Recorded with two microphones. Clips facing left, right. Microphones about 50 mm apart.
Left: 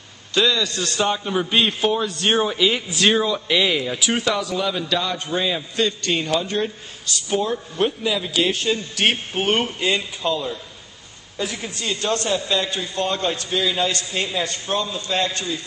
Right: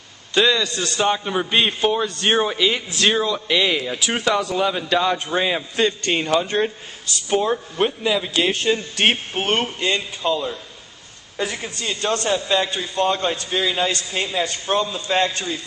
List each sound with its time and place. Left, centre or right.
0.3 s a man's voice: right
9.5 s speech: centre
14.7 s a man's voice: right